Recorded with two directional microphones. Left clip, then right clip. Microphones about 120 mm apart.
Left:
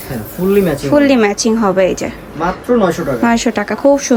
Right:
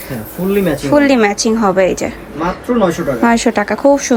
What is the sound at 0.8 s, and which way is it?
Speech, 15° left (ahead or behind).